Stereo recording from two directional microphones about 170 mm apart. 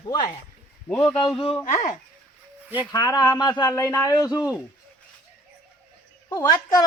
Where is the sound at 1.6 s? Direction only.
45° left (ahead or behind).